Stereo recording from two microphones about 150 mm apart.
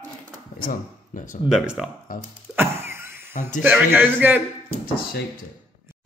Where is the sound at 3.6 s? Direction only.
10° right (ahead or behind).